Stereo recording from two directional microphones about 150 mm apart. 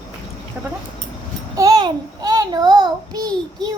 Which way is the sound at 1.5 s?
25° right (ahead or behind).